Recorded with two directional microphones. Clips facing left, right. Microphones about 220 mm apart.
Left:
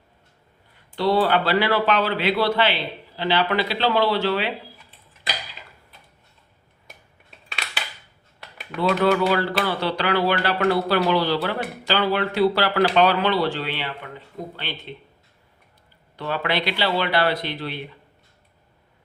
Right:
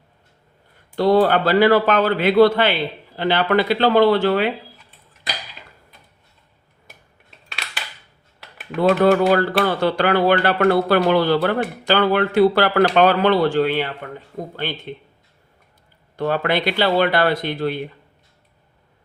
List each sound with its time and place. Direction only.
0.9 s speech: 45° right (ahead or behind)
7.3 s a sound: centre (ahead or behind)
8.8 s speech: 50° right (ahead or behind)
16.1 s speech: 45° right (ahead or behind)